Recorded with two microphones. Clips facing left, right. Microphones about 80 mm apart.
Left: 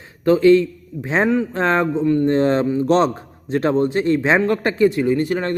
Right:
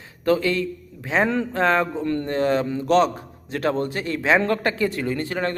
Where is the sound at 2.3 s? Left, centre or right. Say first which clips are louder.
Left 5 dB; left.